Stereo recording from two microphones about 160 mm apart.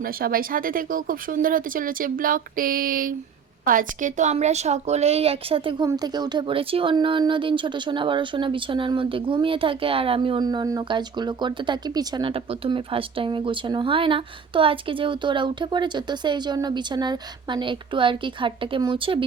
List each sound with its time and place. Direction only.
0.0 s speech: 65° right (ahead or behind); by 19.2 s 35° right (ahead or behind)